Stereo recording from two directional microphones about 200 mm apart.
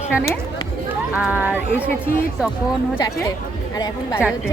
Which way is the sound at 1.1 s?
5° right (ahead or behind).